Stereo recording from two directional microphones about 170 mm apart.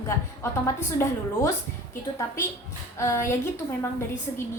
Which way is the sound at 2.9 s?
15° left (ahead or behind).